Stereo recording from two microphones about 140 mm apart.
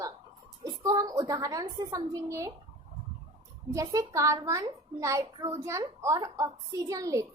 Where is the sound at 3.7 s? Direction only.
25° right (ahead or behind).